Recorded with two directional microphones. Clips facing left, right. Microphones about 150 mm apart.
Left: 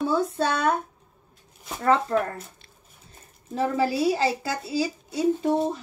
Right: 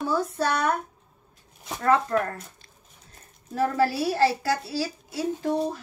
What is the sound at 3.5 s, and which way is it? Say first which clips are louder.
Speech: right 1 dB; 20° left (ahead or behind).